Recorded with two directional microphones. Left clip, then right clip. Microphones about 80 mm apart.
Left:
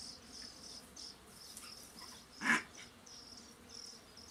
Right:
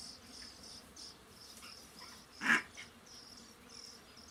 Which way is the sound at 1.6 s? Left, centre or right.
Centre.